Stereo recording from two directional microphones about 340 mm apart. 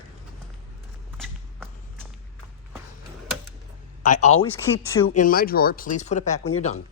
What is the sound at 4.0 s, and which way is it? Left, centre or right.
Speech, left.